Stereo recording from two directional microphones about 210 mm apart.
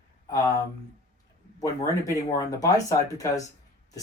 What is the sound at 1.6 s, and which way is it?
Speech, 15° left (ahead or behind).